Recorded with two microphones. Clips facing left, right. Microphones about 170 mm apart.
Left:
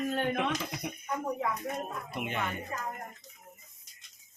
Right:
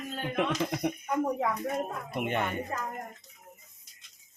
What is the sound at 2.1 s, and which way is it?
Speech, 50° right (ahead or behind).